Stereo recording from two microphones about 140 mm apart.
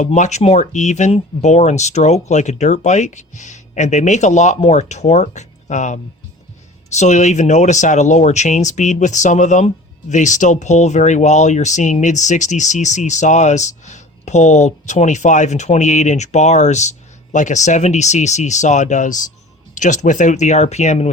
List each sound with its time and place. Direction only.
0.0 s speech: 55° left (ahead or behind)